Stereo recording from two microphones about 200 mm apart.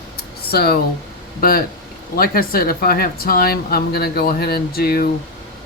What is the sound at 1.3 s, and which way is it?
Speech, 45° left (ahead or behind).